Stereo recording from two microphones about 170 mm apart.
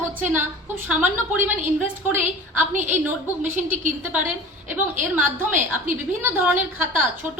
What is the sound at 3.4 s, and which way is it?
Speech, 45° right (ahead or behind).